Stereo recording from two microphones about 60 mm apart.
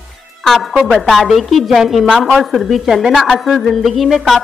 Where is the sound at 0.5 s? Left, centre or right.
Centre.